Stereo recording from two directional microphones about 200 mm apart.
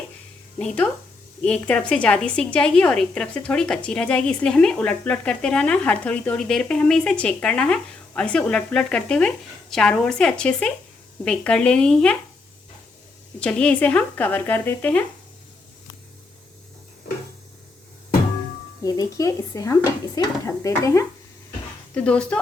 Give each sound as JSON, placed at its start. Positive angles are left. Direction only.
{"t": 1.4, "sound": "speech", "side_deg": 5}
{"t": 13.4, "sound": "speech", "side_deg": 5}
{"t": 18.8, "sound": "speech", "side_deg": 15}